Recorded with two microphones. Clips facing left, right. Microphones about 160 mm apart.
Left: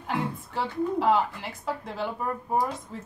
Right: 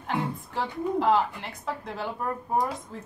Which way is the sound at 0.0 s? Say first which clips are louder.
Even; centre (ahead or behind).